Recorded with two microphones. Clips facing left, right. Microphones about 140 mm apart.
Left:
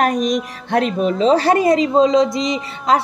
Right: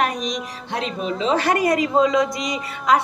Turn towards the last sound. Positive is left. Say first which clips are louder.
# left 2 dB
turn(degrees=25)  # may be behind; listen again after turning